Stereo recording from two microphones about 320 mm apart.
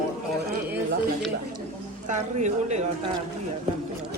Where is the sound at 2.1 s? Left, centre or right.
Right.